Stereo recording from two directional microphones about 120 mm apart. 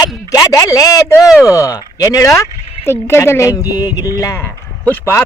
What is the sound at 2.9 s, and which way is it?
Speech, 20° left (ahead or behind).